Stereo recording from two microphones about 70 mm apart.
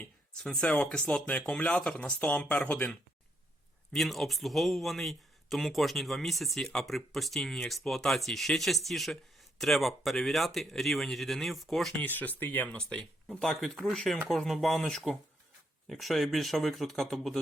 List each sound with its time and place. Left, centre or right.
0.0 s speech: centre
3.9 s speech: centre
11.9 s speech: left
12.6 s speech: centre